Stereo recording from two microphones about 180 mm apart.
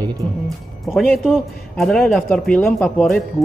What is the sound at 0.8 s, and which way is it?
A man's voice, centre (ahead or behind).